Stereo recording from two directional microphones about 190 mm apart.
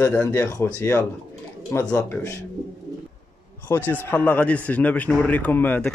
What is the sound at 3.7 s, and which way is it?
A man's voice, 10° left (ahead or behind).